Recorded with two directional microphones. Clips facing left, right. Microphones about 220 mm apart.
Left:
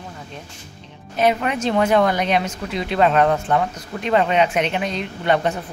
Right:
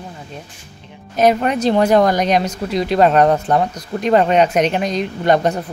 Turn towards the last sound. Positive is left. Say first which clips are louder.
# right 4 dB
turn(degrees=-40)  # may be behind; listen again after turning